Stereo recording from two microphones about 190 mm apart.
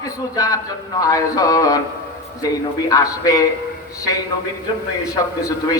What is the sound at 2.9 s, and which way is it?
Speech, 20° left (ahead or behind).